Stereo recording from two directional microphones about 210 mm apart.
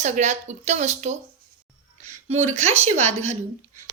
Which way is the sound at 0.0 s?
35° right (ahead or behind).